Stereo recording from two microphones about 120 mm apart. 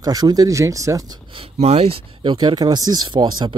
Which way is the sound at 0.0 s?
35° right (ahead or behind).